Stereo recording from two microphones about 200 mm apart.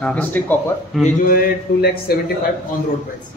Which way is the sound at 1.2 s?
45° left (ahead or behind).